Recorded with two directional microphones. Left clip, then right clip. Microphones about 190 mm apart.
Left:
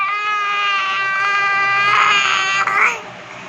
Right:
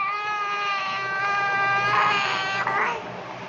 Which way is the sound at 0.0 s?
5° right (ahead or behind).